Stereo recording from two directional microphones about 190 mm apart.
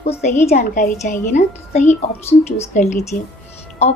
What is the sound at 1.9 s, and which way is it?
Speech, 10° left (ahead or behind).